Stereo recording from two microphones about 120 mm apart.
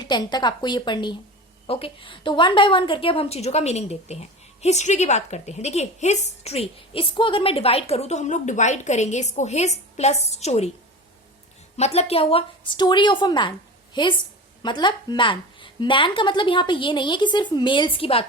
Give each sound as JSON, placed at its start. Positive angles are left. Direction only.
{"t": 0.0, "sound": "a woman's voice", "side_deg": 35}
{"t": 1.6, "sound": "a woman's voice", "side_deg": 50}
{"t": 11.8, "sound": "a woman's voice", "side_deg": 60}